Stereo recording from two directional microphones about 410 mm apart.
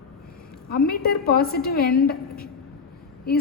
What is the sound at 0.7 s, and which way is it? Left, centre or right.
A woman's voice, left.